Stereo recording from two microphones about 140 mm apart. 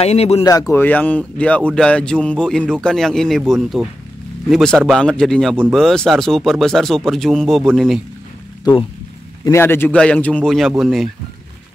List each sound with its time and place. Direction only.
0.0 s speech: 45° left (ahead or behind)
0.5 s a man's voice: 20° left (ahead or behind); by 8.0 s centre (ahead or behind)
9.4 s a man's voice: 20° left (ahead or behind); by 11.1 s centre (ahead or behind)